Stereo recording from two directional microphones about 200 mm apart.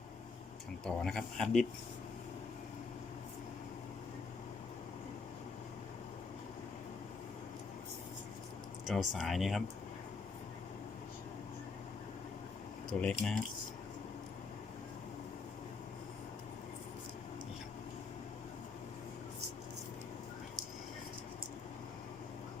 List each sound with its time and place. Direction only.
0.9 s speech: 5° left (ahead or behind)
8.9 s speech: centre (ahead or behind)
12.9 s speech: 5° left (ahead or behind)